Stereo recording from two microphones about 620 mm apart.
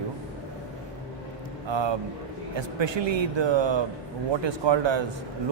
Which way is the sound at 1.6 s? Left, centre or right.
Right.